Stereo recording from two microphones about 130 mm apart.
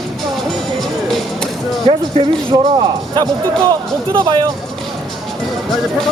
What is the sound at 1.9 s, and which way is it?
Speech, 45° right (ahead or behind).